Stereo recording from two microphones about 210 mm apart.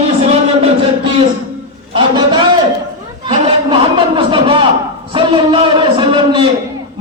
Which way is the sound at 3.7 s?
25° right (ahead or behind).